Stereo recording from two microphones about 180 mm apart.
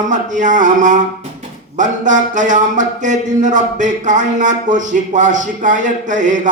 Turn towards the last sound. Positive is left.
turn(degrees=-45)  # may be behind; listen again after turning